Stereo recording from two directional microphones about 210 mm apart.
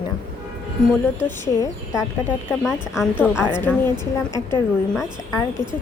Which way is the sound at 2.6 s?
Centre (ahead or behind).